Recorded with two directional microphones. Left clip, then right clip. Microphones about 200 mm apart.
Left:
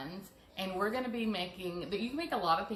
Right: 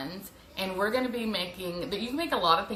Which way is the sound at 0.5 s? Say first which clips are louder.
Right 6 dB; 15° right (ahead or behind).